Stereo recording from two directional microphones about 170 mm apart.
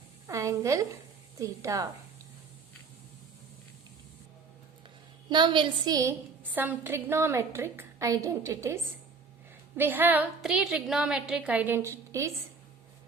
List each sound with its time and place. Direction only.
0.3 s a woman's voice: 20° right (ahead or behind)
5.3 s a woman's voice: 25° right (ahead or behind)